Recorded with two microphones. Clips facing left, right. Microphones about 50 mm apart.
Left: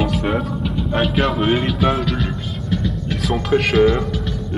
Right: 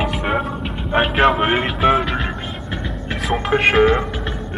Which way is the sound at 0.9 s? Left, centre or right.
Right.